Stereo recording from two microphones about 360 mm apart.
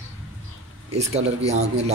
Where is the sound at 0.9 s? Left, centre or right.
Centre.